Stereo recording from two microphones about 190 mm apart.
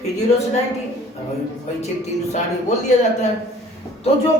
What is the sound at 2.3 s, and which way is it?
Speech, 35° left (ahead or behind).